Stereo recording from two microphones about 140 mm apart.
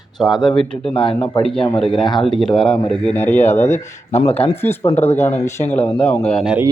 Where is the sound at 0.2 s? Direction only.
Centre (ahead or behind).